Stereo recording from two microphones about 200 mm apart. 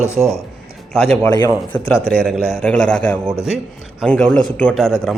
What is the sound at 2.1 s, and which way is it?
A man's voice, centre (ahead or behind).